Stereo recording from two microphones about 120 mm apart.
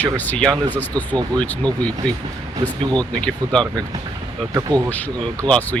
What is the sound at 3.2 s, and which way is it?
Speech, 5° left (ahead or behind).